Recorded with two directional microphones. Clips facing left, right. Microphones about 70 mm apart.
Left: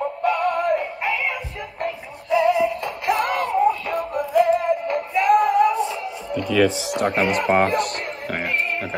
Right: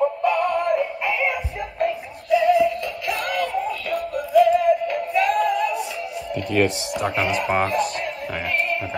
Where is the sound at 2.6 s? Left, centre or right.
Left.